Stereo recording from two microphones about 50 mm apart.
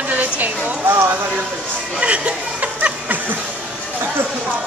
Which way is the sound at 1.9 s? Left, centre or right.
Right.